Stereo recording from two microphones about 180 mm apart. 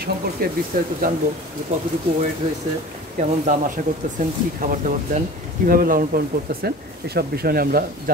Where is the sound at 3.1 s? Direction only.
45° right (ahead or behind).